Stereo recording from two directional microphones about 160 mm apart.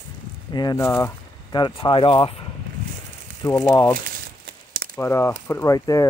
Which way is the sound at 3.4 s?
20° left (ahead or behind).